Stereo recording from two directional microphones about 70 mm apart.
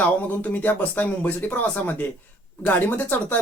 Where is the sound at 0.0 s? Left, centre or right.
Left.